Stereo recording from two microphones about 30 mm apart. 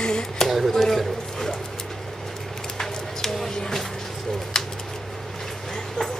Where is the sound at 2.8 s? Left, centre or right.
Centre.